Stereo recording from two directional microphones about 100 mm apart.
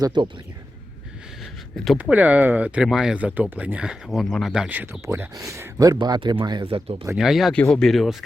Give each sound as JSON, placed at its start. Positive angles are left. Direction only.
{"t": 0.0, "sound": "speech", "side_deg": -50}
{"t": 1.7, "sound": "speech", "side_deg": 0}
{"t": 2.0, "sound": "speech", "side_deg": -15}
{"t": 4.7, "sound": "speech", "side_deg": -15}
{"t": 6.0, "sound": "speech", "side_deg": -50}
{"t": 6.7, "sound": "speech", "side_deg": -70}
{"t": 7.2, "sound": "speech", "side_deg": 0}
{"t": 7.5, "sound": "speech", "side_deg": 10}